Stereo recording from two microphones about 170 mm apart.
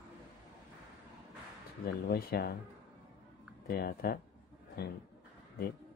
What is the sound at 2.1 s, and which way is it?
Speech, 65° left (ahead or behind).